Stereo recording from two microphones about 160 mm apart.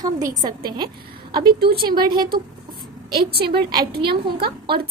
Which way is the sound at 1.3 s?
75° right (ahead or behind).